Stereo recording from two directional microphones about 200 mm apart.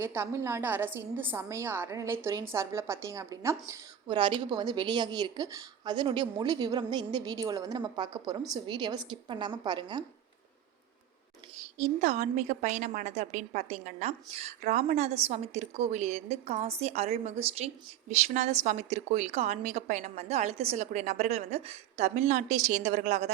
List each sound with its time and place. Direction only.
0.0 s a woman's voice: 10° right (ahead or behind)
11.8 s a woman's voice: 35° right (ahead or behind)